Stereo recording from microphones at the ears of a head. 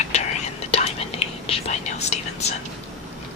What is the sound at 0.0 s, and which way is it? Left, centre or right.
Whispering, left.